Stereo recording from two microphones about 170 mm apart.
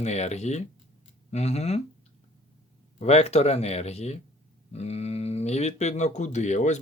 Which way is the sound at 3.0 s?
40° left (ahead or behind).